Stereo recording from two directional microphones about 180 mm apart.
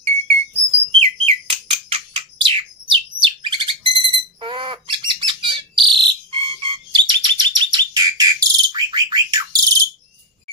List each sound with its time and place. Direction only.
0.9 s bird: 35° right (ahead or behind)